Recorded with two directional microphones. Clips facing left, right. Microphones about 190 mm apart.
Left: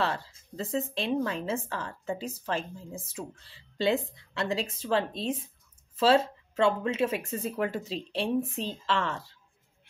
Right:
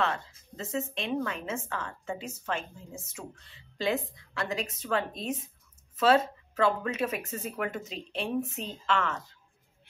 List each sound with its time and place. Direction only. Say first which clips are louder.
0.0 s a woman's voice: even; 30° left (ahead or behind)